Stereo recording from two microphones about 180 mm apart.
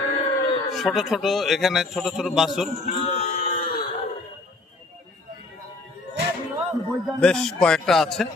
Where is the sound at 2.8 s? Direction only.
35° left (ahead or behind).